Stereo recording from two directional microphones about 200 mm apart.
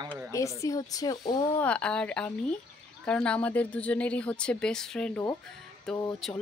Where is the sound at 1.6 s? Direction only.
5° left (ahead or behind).